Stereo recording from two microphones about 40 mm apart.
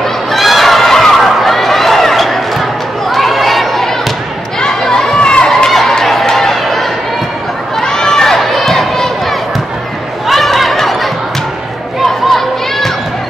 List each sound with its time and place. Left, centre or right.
0.3 s a sound: centre
3.1 s crowd: centre
4.6 s chatter: centre
5.7 s chatter: centre
5.9 s run: centre
7.7 s run: centre
8.4 s crowd: centre
10.2 s a sound: centre
12.3 s children playing: centre